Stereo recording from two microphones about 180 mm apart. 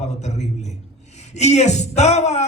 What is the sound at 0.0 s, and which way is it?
A man's voice, 40° left (ahead or behind).